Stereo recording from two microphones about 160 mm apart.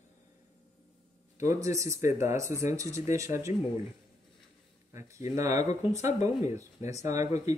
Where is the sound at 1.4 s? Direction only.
20° right (ahead or behind).